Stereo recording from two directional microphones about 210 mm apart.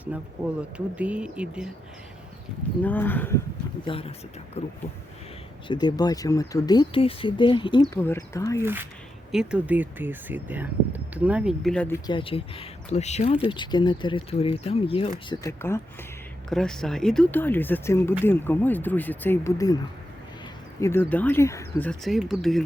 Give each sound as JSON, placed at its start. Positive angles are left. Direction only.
{"t": 0.9, "sound": "speech", "side_deg": -5}
{"t": 2.8, "sound": "speech", "side_deg": 10}
{"t": 3.8, "sound": "speech", "side_deg": 25}
{"t": 5.6, "sound": "speech", "side_deg": 20}
{"t": 7.9, "sound": "speech", "side_deg": 10}
{"t": 8.6, "sound": "speech", "side_deg": -10}
{"t": 12.0, "sound": "speech", "side_deg": 25}
{"t": 15.3, "sound": "speech", "side_deg": 15}
{"t": 16.5, "sound": "speech", "side_deg": 5}
{"t": 20.8, "sound": "speech", "side_deg": 10}